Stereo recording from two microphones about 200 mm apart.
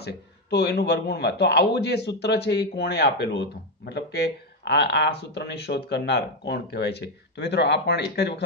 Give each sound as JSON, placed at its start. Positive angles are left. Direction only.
{"t": 0.0, "sound": "a man's voice", "side_deg": 55}